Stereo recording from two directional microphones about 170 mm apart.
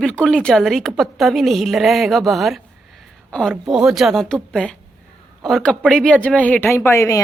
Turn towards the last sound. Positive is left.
turn(degrees=15)  # may be behind; listen again after turning